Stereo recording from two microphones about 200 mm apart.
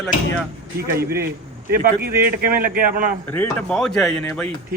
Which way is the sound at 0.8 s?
50° right (ahead or behind).